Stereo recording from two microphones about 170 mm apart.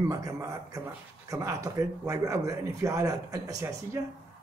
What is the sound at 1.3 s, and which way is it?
Speech, 20° right (ahead or behind).